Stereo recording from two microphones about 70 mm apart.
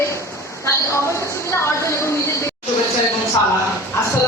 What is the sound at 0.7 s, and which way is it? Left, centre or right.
A woman's voice, left.